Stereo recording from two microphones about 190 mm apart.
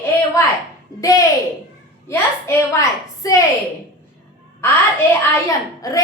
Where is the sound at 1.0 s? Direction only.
20° left (ahead or behind).